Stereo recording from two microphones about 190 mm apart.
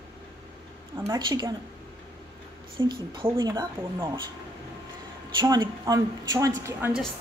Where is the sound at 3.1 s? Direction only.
25° right (ahead or behind).